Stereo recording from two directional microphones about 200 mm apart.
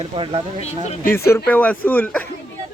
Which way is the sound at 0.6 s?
35° left (ahead or behind).